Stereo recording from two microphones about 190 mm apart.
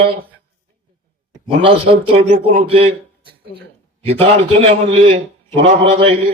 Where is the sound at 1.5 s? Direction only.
30° right (ahead or behind).